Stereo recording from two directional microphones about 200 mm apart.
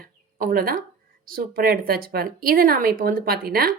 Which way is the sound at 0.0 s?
45° right (ahead or behind).